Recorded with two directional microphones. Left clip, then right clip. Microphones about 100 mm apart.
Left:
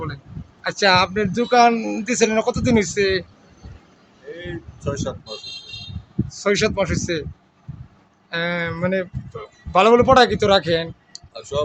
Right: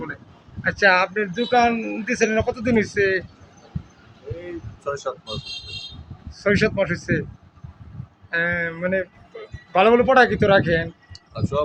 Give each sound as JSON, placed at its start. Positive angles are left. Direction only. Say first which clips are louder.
{"t": 0.6, "sound": "a man's voice", "louder": "even", "side_deg": 35}
{"t": 1.1, "sound": "a man's voice", "louder": "left 3 dB", "side_deg": 55}
{"t": 4.4, "sound": "a sound", "louder": "left 2 dB", "side_deg": -10}
{"t": 6.3, "sound": "a man's voice", "louder": "even", "side_deg": 35}
{"t": 8.3, "sound": "speech", "louder": "right 1 dB", "side_deg": 35}
{"t": 9.7, "sound": "a man's voice", "louder": "left 2 dB", "side_deg": 40}
{"t": 11.1, "sound": "a sound", "louder": "right 1 dB", "side_deg": -5}